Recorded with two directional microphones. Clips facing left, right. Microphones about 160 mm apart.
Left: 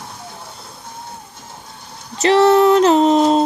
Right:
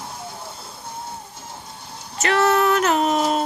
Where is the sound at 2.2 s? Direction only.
30° left (ahead or behind).